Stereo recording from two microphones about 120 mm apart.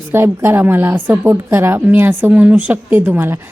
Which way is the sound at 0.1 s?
20° right (ahead or behind).